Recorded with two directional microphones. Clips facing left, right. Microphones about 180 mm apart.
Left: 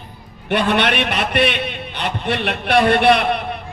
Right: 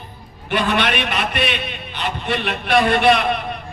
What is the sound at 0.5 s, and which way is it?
A man's voice, 60° left (ahead or behind).